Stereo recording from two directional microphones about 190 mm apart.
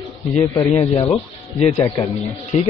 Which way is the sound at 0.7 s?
30° left (ahead or behind).